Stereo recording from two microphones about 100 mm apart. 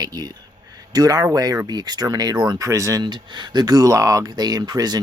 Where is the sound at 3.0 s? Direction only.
50° right (ahead or behind).